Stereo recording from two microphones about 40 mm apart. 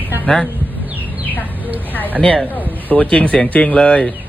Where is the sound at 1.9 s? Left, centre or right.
Left.